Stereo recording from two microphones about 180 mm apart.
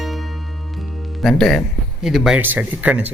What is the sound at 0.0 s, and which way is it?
Music, centre (ahead or behind).